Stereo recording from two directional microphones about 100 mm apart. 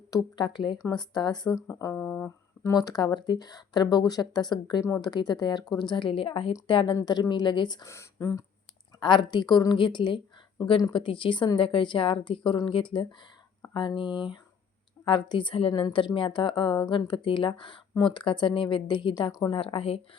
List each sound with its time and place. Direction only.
0.1 s speech: 50° left (ahead or behind)
2.0 s speech: 15° left (ahead or behind)
2.7 s a woman's voice: 40° left (ahead or behind); by 6.9 s 60° left (ahead or behind)
6.9 s speech: 45° left (ahead or behind)
7.9 s speech: 30° left (ahead or behind)
9.0 s a woman's voice: 50° left (ahead or behind)
19.3 s speech: 45° left (ahead or behind)
19.5 s a woman's voice: 70° left (ahead or behind)